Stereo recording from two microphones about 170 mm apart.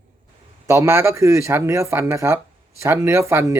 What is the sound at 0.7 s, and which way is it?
Speech, 15° right (ahead or behind).